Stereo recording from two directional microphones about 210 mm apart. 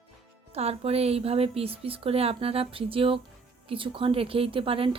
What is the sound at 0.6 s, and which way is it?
A woman's voice, 30° right (ahead or behind).